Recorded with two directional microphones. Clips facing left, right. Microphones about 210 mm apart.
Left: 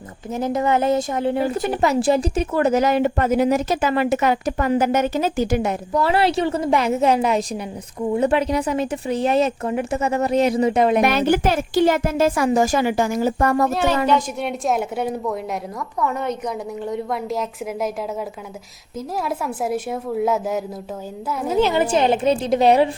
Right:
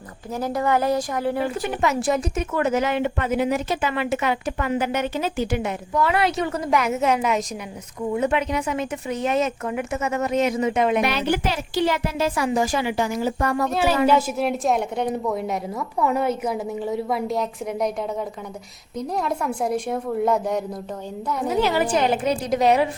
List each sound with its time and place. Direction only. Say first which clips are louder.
0.3 s a woman's voice: left 2 dB; 20° left (ahead or behind)
1.4 s speech: left 3 dB; 40° left (ahead or behind)
13.7 s a woman's voice: even; 5° right (ahead or behind)
16.0 s a woman's voice: right 2 dB; 10° right (ahead or behind)
18.9 s a woman's voice: even; 5° left (ahead or behind)
21.6 s a woman's voice: left 4 dB; 20° left (ahead or behind)